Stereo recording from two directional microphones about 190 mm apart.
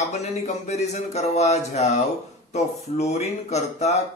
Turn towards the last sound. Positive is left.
turn(degrees=35)  # may be behind; listen again after turning